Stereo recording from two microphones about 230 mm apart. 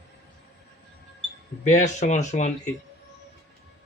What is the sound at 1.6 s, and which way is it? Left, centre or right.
Speech, left.